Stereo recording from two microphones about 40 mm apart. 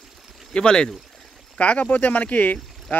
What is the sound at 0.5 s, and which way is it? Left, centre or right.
Speech, left.